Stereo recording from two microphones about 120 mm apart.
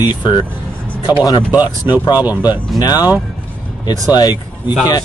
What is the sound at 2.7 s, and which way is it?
Speech, 35° left (ahead or behind).